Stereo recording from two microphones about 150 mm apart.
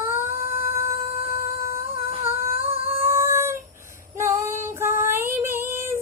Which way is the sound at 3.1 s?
20° right (ahead or behind).